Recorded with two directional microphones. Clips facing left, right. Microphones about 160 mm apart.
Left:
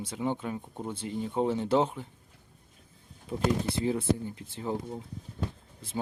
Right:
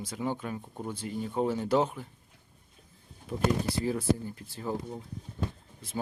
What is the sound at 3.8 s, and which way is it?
Speech, 20° left (ahead or behind).